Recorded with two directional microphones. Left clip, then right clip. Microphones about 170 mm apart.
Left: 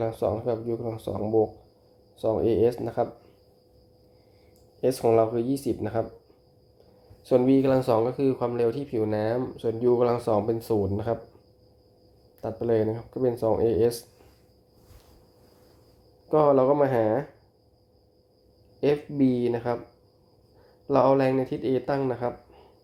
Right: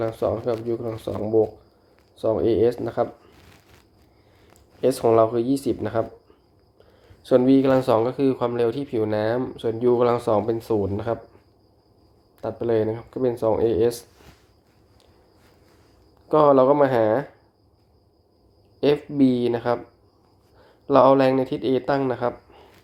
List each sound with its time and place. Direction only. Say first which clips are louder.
0.0 s speech: right 3 dB; 15° left (ahead or behind)
4.8 s speech: right 4 dB; 20° left (ahead or behind)
7.2 s speech: right 4 dB; 15° left (ahead or behind)
12.4 s speech: right 3 dB; 20° left (ahead or behind)
16.3 s speech: right 4 dB; 15° left (ahead or behind)
18.8 s speech: right 4 dB; 15° left (ahead or behind)
20.8 s speech: right 5 dB; 15° left (ahead or behind)